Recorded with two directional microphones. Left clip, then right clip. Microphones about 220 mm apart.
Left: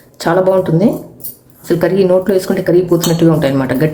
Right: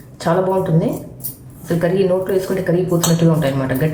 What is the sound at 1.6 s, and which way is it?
Speech, 35° left (ahead or behind).